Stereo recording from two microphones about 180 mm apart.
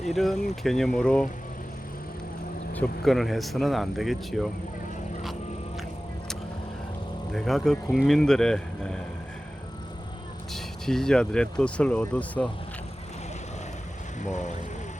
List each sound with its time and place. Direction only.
0.1 s speech: centre (ahead or behind)
2.7 s speech: 5° left (ahead or behind)
7.3 s speech: centre (ahead or behind)
10.5 s speech: 5° left (ahead or behind)
14.2 s speech: 40° left (ahead or behind)